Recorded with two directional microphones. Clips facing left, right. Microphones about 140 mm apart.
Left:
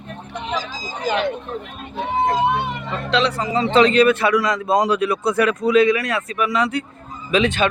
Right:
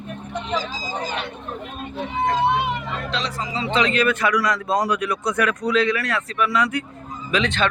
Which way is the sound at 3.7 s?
30° left (ahead or behind).